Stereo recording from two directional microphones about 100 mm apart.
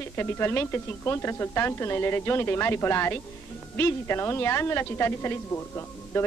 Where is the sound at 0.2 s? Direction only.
25° left (ahead or behind).